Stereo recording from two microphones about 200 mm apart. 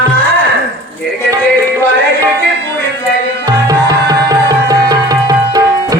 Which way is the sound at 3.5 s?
20° right (ahead or behind).